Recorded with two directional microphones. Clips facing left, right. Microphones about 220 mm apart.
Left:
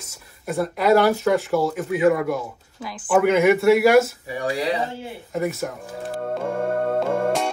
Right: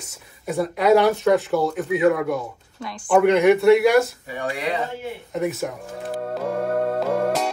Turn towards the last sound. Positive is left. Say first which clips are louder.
# even
turn(degrees=0)  # may be behind; listen again after turning